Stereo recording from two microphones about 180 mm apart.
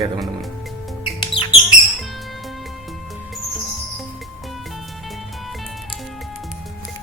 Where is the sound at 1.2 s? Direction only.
25° left (ahead or behind).